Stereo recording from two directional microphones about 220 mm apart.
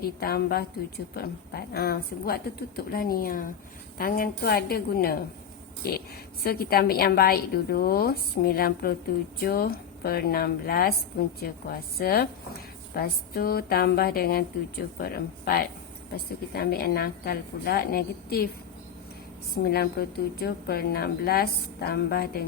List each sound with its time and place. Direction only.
0.0 s a woman's voice: 45° left (ahead or behind)
6.4 s a woman's voice: 45° left (ahead or behind)
19.6 s a woman's voice: 45° left (ahead or behind)